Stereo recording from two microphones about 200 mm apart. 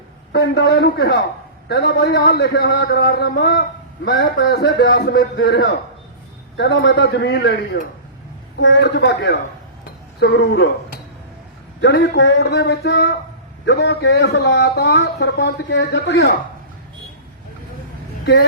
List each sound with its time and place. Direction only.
0.3 s a man's voice: 55° left (ahead or behind)